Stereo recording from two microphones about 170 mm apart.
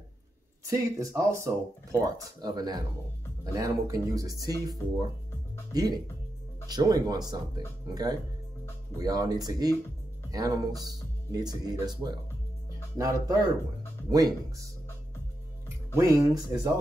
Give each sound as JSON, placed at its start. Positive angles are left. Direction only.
{"t": 0.7, "sound": "speech", "side_deg": -15}
{"t": 15.9, "sound": "speech", "side_deg": -20}